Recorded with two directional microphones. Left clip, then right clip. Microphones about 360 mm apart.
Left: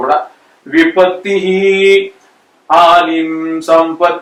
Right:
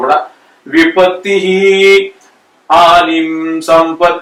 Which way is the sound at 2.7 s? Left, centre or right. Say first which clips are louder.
Right 1 dB; centre.